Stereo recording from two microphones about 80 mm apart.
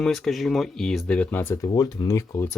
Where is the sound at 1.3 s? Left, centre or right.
Left.